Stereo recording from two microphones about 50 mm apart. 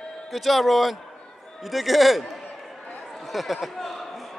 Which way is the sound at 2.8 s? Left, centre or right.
Left.